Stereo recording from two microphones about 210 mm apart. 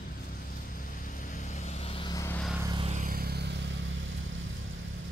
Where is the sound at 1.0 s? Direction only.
40° left (ahead or behind); by 2.4 s 10° left (ahead or behind).